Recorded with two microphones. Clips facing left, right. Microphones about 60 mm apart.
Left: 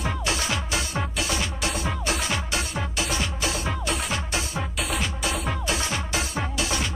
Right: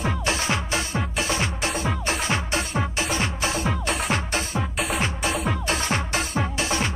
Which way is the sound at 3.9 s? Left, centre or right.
Right.